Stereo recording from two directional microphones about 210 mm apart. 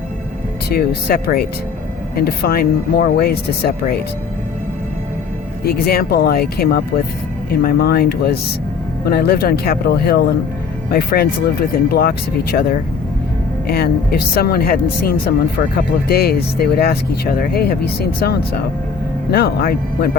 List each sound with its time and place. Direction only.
0.7 s speech: 45° left (ahead or behind)
5.6 s speech: 45° left (ahead or behind)
16.0 s speech: 45° left (ahead or behind)